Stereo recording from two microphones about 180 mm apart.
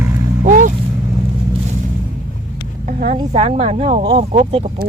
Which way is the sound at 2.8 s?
45° right (ahead or behind).